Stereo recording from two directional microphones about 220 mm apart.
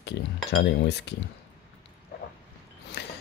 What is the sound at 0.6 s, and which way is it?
Speech, 50° left (ahead or behind).